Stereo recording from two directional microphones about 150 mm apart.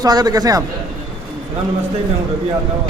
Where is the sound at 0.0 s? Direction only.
25° right (ahead or behind).